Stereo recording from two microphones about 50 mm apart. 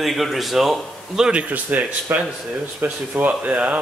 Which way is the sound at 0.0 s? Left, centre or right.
Centre.